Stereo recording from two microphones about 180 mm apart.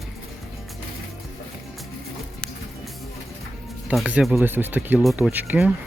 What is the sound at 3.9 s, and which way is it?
Speech, 5° right (ahead or behind).